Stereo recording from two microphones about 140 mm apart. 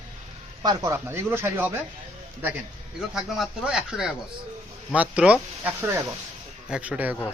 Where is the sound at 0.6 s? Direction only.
25° right (ahead or behind).